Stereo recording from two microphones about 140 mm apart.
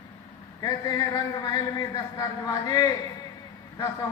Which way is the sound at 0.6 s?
30° left (ahead or behind).